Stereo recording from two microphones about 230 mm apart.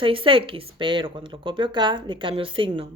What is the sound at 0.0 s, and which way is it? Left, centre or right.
A woman's voice, right.